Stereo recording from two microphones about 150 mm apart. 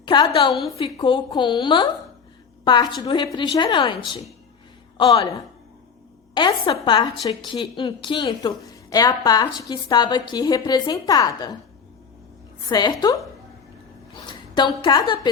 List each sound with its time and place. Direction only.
0.0 s a woman's voice: 30° left (ahead or behind)
4.9 s a woman's voice: 30° left (ahead or behind)
12.6 s a woman's voice: 25° left (ahead or behind)
14.3 s a woman's voice: 30° left (ahead or behind)